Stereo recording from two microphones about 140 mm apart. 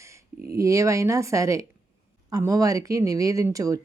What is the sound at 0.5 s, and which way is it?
Speech, 25° right (ahead or behind).